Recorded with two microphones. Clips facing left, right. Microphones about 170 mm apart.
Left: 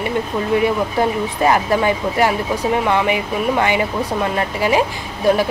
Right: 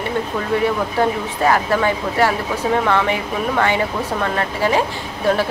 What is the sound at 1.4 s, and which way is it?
Speech, 20° left (ahead or behind).